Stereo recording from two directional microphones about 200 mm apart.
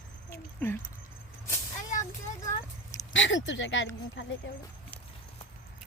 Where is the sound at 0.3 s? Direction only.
10° left (ahead or behind).